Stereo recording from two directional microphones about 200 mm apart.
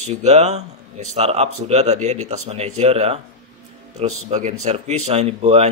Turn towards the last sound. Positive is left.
turn(degrees=-35)  # may be behind; listen again after turning